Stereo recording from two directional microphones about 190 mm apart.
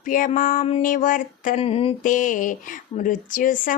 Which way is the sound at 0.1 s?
45° left (ahead or behind).